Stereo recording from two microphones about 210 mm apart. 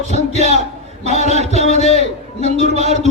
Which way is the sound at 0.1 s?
30° left (ahead or behind).